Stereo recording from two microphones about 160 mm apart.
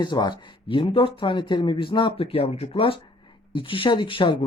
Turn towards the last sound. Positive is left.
turn(degrees=30)  # may be behind; listen again after turning